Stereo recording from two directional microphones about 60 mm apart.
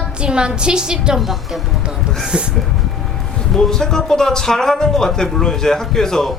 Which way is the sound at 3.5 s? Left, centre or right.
Centre.